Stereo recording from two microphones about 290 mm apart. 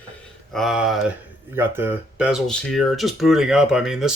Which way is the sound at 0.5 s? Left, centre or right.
Centre.